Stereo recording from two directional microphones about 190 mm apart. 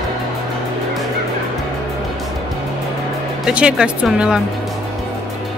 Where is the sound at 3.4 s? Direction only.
5° right (ahead or behind).